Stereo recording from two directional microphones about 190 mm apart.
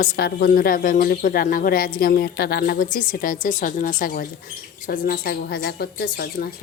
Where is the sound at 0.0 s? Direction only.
55° left (ahead or behind).